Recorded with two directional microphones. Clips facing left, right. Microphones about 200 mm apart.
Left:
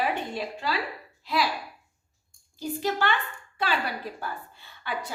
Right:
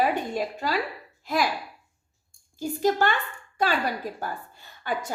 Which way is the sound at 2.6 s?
45° right (ahead or behind).